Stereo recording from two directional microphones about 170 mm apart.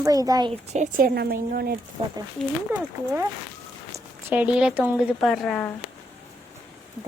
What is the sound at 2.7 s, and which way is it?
Speech, 10° right (ahead or behind).